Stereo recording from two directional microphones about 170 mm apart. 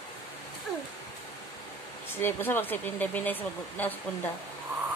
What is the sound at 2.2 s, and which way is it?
Speech, 10° left (ahead or behind).